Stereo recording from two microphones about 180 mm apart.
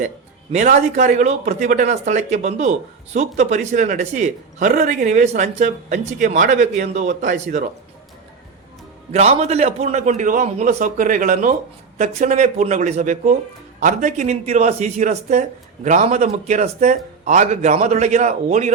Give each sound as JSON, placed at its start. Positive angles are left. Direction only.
{"t": 0.5, "sound": "speech", "side_deg": -40}
{"t": 9.1, "sound": "speech", "side_deg": -35}